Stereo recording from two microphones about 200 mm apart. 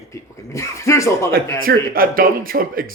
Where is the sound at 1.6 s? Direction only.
45° right (ahead or behind).